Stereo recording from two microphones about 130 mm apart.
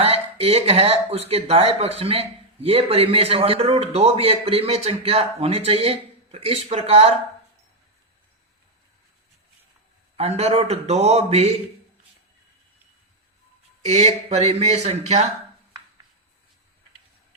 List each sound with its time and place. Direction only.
0.0 s speech: 50° right (ahead or behind)
10.2 s speech: 55° right (ahead or behind)
13.8 s speech: 60° right (ahead or behind)